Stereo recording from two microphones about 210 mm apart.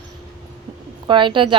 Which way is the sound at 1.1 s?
25° right (ahead or behind).